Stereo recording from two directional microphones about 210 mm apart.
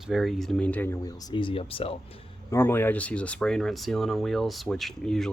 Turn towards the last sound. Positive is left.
turn(degrees=0)  # may be behind; listen again after turning